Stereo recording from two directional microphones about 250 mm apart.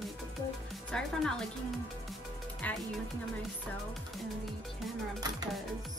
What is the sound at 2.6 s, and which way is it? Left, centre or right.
Speech, centre.